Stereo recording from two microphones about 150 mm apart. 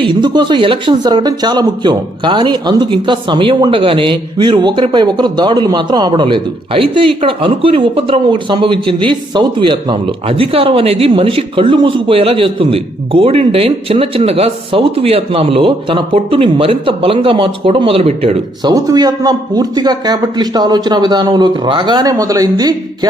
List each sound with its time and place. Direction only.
0.1 s speech: 30° right (ahead or behind)
18.6 s a man's voice: 25° right (ahead or behind)